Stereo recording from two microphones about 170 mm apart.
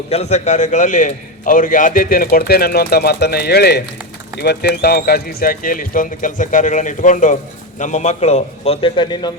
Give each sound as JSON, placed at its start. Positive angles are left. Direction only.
{"t": 0.1, "sound": "a man's voice", "side_deg": 40}